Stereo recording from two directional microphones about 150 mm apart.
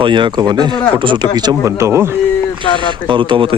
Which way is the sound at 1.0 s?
35° right (ahead or behind).